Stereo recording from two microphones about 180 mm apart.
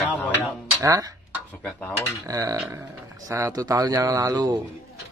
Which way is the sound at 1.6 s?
10° left (ahead or behind).